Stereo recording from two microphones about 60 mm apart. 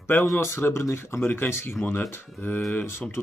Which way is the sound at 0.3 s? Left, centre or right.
Left.